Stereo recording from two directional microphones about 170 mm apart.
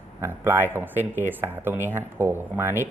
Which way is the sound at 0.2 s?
15° right (ahead or behind).